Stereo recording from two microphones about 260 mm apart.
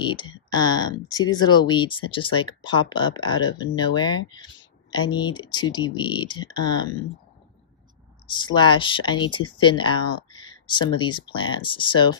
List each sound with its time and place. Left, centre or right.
0.0 s speech: centre
8.3 s speech: centre